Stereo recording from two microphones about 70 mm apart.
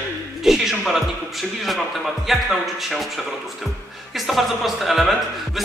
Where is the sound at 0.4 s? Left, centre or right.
Centre.